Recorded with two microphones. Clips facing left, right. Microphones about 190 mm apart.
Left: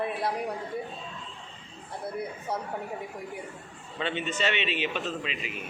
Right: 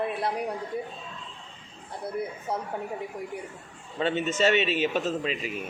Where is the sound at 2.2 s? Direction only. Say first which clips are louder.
Right 3 dB; centre (ahead or behind).